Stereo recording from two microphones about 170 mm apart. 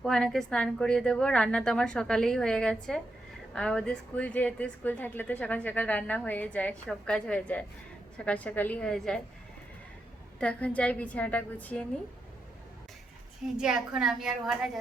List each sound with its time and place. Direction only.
0.0 s a woman's voice: 5° left (ahead or behind)
10.4 s a woman's voice: 5° left (ahead or behind)
13.4 s a woman's voice: 5° right (ahead or behind)